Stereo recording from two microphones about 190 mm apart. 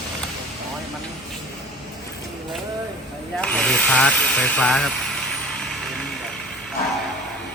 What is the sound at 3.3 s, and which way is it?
Speech, 5° left (ahead or behind).